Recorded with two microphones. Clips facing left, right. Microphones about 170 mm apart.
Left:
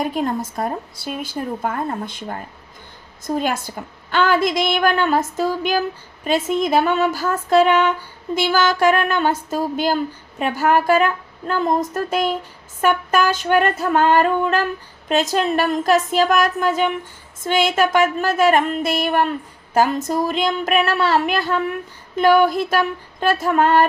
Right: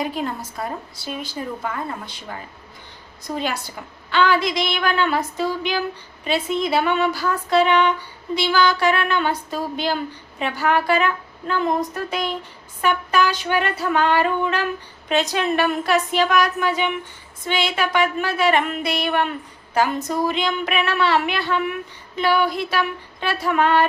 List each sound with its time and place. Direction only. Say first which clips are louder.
0.0 s a woman's voice: left 4 dB; 45° left (ahead or behind)
20.4 s speech: left 4 dB; 45° left (ahead or behind)